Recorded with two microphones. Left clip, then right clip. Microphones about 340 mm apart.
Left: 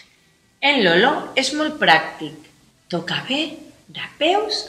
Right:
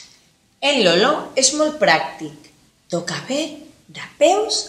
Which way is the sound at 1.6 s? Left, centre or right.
Centre.